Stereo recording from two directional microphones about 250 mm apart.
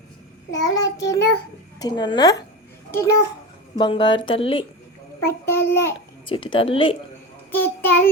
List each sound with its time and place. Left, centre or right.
0.5 s a child's voice: centre
5.2 s a child's voice: centre
6.2 s speech: centre
7.5 s a child's voice: centre